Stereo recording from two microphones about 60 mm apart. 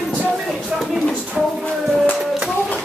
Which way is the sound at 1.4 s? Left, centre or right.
Centre.